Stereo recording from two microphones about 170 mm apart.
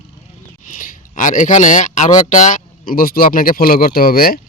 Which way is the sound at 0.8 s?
50° left (ahead or behind).